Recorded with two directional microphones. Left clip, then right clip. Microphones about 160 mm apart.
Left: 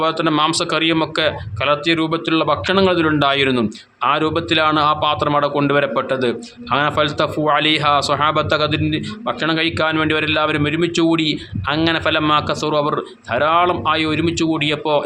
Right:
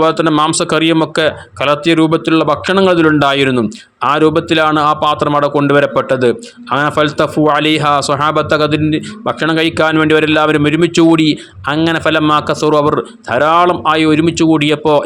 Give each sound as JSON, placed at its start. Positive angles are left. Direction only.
{"t": 0.0, "sound": "speech", "side_deg": -40}